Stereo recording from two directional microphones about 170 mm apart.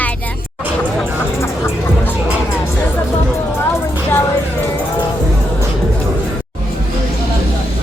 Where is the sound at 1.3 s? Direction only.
15° left (ahead or behind).